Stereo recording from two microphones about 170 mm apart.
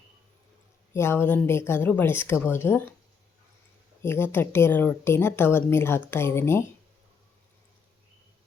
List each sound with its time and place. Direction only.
0.9 s a woman's voice: 15° left (ahead or behind)
4.0 s a woman's voice: 15° left (ahead or behind)